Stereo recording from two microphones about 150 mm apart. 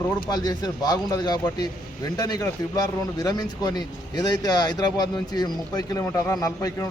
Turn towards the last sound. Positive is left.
turn(degrees=20)  # may be behind; listen again after turning